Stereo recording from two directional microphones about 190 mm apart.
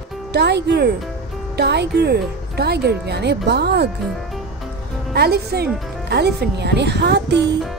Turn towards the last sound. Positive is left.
turn(degrees=-65)  # may be behind; listen again after turning